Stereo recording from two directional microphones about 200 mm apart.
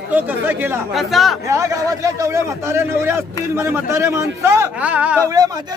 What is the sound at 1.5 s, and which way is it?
A man's voice, 15° right (ahead or behind).